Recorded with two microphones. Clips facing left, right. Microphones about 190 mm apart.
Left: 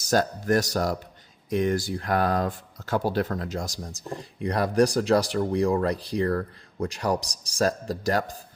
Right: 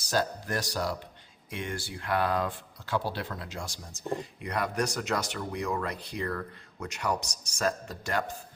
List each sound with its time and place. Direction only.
0.0 s speech: 45° left (ahead or behind)